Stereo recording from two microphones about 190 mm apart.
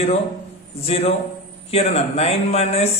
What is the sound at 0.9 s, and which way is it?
A man's voice, 30° left (ahead or behind).